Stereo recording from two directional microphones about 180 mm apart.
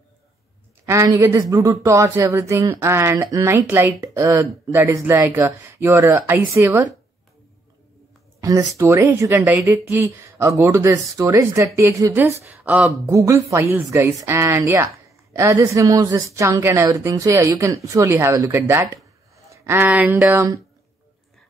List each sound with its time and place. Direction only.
0.8 s speech: 15° right (ahead or behind)
8.4 s speech: 20° right (ahead or behind); by 13.1 s 5° right (ahead or behind)
13.1 s speech: 15° right (ahead or behind)